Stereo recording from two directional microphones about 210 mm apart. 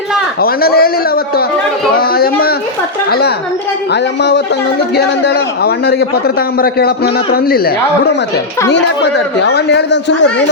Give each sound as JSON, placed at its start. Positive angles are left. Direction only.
{"t": 0.4, "sound": "a man's voice", "side_deg": 45}